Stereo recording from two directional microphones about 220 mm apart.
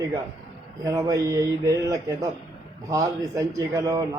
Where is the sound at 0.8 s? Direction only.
15° right (ahead or behind).